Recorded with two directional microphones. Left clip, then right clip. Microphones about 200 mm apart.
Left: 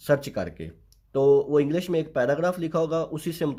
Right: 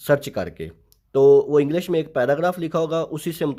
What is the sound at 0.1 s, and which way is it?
Speech, 25° right (ahead or behind).